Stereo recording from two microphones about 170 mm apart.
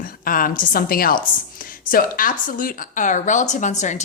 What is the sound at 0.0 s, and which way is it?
A woman's voice, 55° left (ahead or behind).